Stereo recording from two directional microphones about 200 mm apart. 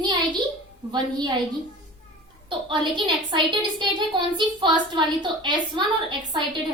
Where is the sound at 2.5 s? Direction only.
25° right (ahead or behind).